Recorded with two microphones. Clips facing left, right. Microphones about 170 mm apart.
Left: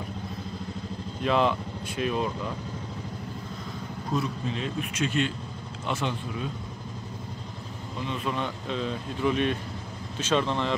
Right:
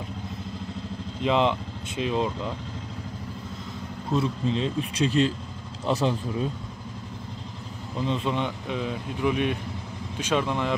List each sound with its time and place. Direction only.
1.2 s speech: 20° right (ahead or behind)
4.1 s speech: 30° right (ahead or behind)
8.1 s speech: 25° right (ahead or behind)